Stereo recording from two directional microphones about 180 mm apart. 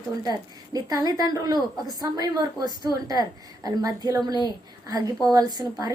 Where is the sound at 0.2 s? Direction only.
20° right (ahead or behind).